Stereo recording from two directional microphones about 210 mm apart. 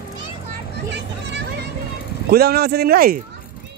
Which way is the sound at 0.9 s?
55° right (ahead or behind).